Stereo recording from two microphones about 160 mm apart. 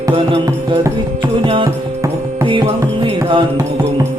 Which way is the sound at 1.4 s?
35° right (ahead or behind).